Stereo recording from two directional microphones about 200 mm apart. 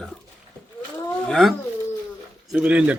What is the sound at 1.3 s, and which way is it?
Speech, centre (ahead or behind).